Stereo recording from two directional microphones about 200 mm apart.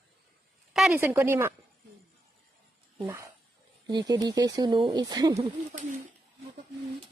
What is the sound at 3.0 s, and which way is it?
A woman's voice, 15° right (ahead or behind).